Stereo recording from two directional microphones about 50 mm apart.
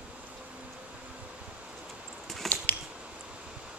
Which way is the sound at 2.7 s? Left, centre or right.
Left.